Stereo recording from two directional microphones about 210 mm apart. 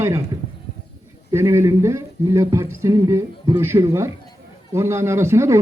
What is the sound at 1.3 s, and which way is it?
A man's voice, 10° right (ahead or behind).